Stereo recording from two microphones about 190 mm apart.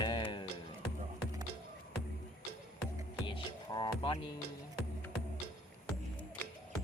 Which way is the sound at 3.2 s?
25° left (ahead or behind).